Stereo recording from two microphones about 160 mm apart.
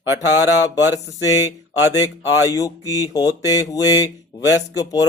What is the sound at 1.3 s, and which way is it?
Mantra, 15° right (ahead or behind).